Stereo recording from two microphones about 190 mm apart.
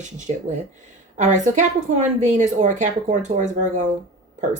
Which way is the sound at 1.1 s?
40° right (ahead or behind).